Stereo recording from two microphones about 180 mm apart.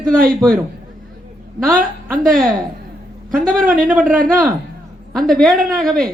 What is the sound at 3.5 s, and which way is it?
Speech, 50° right (ahead or behind).